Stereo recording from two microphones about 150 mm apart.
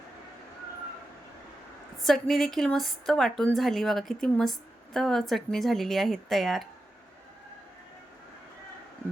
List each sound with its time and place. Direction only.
2.0 s a woman's voice: centre (ahead or behind)